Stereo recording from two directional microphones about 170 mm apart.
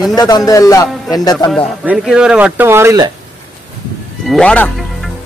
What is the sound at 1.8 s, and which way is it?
Speech, 5° right (ahead or behind).